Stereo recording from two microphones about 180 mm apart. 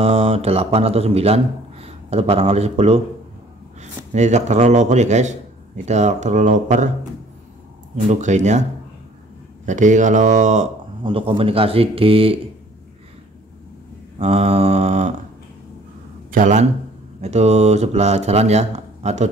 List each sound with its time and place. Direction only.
0.0 s speech: 30° right (ahead or behind)
8.1 s speech: 40° right (ahead or behind)
9.7 s speech: 45° right (ahead or behind)
11.0 s speech: 30° right (ahead or behind)
14.1 s speech: 35° right (ahead or behind)
16.3 s speech: 45° right (ahead or behind)